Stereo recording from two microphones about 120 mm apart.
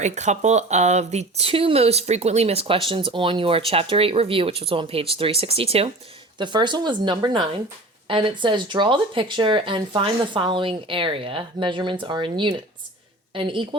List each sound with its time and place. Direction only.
0.0 s speech: 75° right (ahead or behind); by 5.9 s 55° right (ahead or behind)
6.4 s speech: 40° right (ahead or behind)